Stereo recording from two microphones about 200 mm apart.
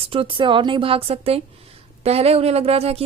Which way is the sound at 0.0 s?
25° right (ahead or behind).